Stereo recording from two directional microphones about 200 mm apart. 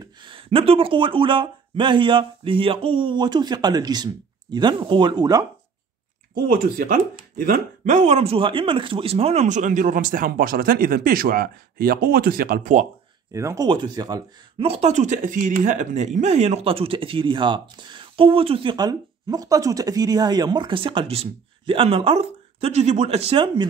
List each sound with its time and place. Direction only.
0.2 s speech: 25° right (ahead or behind)
6.5 s speech: 45° right (ahead or behind)
13.3 s speech: 15° right (ahead or behind)